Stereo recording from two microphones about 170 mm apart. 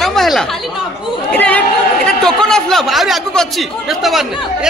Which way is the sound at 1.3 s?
10° left (ahead or behind).